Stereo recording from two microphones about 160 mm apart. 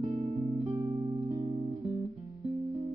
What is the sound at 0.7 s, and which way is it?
Music, 20° right (ahead or behind).